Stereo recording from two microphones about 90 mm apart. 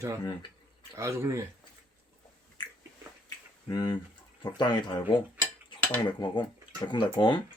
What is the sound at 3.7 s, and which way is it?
Speech, 45° left (ahead or behind).